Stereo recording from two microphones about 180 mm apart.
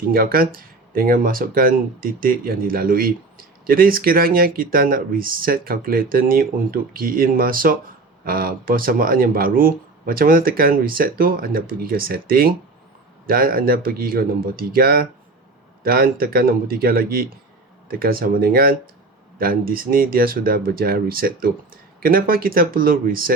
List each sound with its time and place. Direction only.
0.1 s speech: 55° right (ahead or behind)